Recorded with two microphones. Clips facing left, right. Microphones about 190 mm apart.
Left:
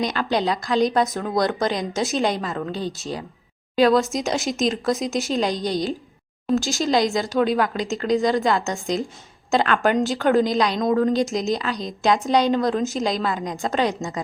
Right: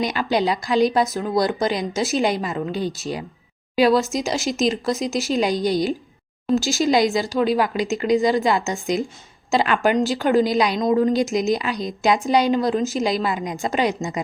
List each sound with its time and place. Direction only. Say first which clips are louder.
0.0 s speech: right 1 dB; 10° right (ahead or behind)